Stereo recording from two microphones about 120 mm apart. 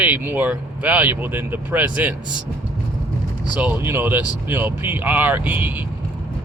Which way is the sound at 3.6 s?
15° right (ahead or behind).